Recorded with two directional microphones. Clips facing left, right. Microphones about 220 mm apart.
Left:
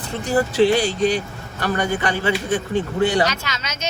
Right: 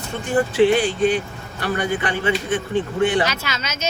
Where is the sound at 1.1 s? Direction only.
40° left (ahead or behind).